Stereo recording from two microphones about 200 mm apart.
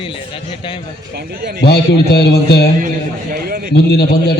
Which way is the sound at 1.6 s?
55° left (ahead or behind).